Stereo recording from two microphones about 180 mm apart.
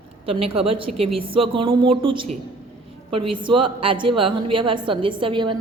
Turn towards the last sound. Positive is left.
turn(degrees=-25)  # may be behind; listen again after turning